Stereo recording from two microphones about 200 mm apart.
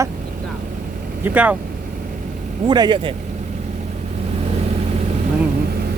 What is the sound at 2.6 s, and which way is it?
Speech, 20° right (ahead or behind).